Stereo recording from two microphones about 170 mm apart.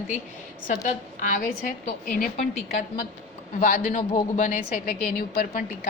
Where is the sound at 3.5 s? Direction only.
50° left (ahead or behind).